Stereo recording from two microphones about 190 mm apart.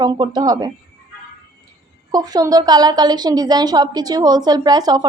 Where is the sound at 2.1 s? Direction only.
20° right (ahead or behind).